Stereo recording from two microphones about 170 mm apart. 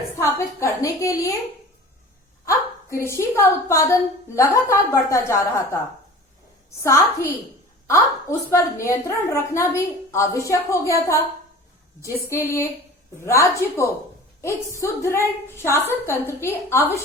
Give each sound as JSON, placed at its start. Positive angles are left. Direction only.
{"t": 0.2, "sound": "a woman's voice", "side_deg": 15}
{"t": 2.4, "sound": "a woman's voice", "side_deg": 15}
{"t": 6.8, "sound": "a woman's voice", "side_deg": 15}
{"t": 12.0, "sound": "a woman's voice", "side_deg": 15}